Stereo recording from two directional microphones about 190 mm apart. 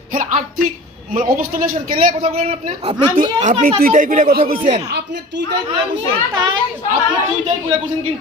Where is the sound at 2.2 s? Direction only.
30° right (ahead or behind).